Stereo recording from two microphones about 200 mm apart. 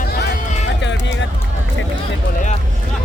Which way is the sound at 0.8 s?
65° left (ahead or behind).